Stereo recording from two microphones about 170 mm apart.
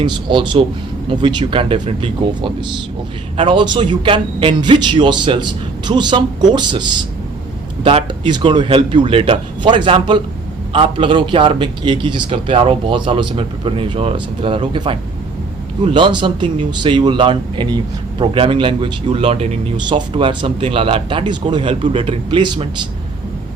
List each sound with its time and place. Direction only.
0.0 s a man's voice: 30° right (ahead or behind)
19.7 s a man's voice: 30° right (ahead or behind)